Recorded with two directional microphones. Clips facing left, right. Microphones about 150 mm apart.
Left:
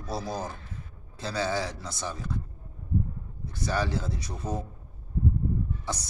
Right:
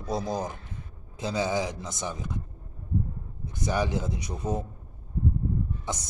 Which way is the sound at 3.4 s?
20° right (ahead or behind).